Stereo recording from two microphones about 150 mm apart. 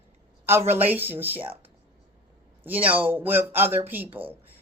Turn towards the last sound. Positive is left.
turn(degrees=-10)  # may be behind; listen again after turning